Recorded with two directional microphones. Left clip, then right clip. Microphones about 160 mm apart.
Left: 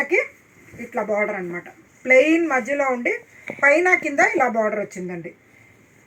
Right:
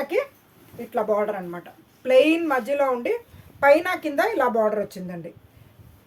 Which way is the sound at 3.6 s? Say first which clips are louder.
Left 2 dB; 50° right (ahead or behind).